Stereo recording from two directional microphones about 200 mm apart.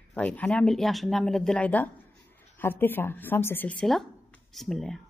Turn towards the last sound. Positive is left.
turn(degrees=0)  # may be behind; listen again after turning